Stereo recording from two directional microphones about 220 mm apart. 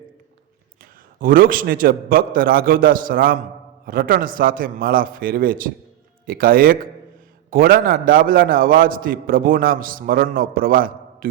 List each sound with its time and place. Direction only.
0.8 s a man's voice: 40° right (ahead or behind)